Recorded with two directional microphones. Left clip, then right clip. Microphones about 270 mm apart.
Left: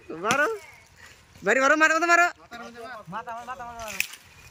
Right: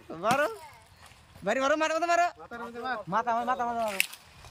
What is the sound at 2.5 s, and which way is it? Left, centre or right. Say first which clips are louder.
Speech: right 4 dB; right.